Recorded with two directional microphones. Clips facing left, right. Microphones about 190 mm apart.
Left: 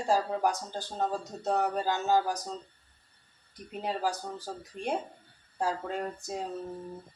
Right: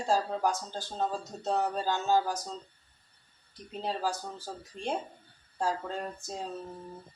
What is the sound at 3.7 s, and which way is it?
Speech, 10° left (ahead or behind).